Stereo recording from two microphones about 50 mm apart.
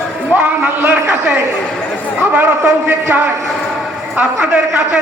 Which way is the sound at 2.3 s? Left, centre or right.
Right.